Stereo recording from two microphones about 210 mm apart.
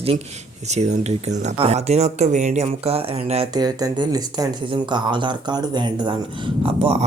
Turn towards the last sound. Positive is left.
turn(degrees=-25)  # may be behind; listen again after turning